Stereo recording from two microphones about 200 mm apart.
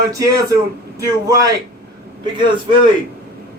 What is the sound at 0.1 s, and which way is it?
A man's voice, 15° right (ahead or behind).